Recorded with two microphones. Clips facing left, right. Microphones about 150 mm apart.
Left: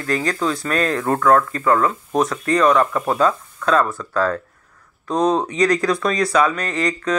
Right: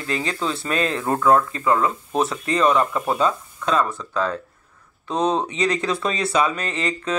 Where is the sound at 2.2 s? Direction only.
25° right (ahead or behind).